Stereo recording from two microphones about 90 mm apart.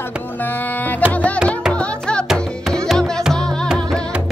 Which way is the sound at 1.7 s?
10° left (ahead or behind).